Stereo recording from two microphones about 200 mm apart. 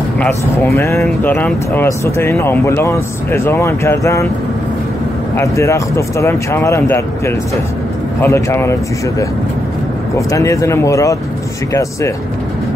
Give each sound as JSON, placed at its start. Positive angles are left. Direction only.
{"t": 0.7, "sound": "speech", "side_deg": 15}
{"t": 5.3, "sound": "speech", "side_deg": 15}
{"t": 10.1, "sound": "speech", "side_deg": 15}